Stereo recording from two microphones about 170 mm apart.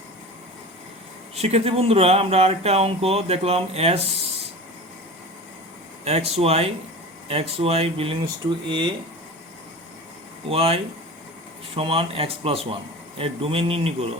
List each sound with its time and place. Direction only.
1.4 s speech: 35° right (ahead or behind)
6.1 s speech: 40° right (ahead or behind)
10.5 s speech: 35° right (ahead or behind)
11.8 s speech: 35° right (ahead or behind)